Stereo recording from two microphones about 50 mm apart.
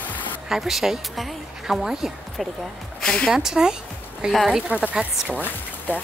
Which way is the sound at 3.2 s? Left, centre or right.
Centre.